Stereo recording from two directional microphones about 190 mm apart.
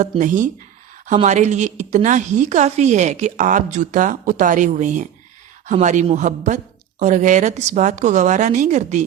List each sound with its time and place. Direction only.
0.0 s a woman's voice: 40° right (ahead or behind)